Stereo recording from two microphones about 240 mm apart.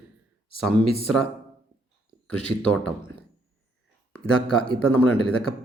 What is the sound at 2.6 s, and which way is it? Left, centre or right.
Speech, centre.